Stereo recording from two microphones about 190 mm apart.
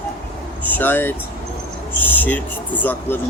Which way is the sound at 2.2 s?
10° left (ahead or behind).